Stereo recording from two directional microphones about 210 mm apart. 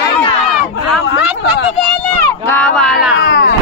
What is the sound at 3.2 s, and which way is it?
Speech, 65° left (ahead or behind).